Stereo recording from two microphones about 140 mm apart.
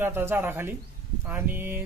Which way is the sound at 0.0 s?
15° right (ahead or behind).